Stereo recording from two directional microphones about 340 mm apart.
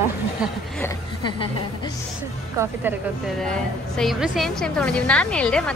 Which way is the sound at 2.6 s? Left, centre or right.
Centre.